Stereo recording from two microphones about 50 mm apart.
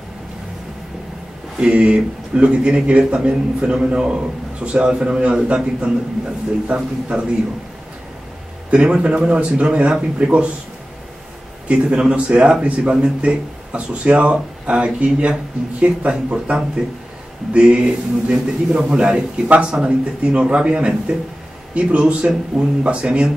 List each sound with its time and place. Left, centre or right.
1.6 s speech: right
8.6 s speech: centre
11.6 s speech: right
21.9 s speech: centre
22.5 s speech: centre
22.8 s speech: right